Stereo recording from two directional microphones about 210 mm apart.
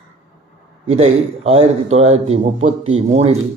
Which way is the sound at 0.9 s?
30° right (ahead or behind).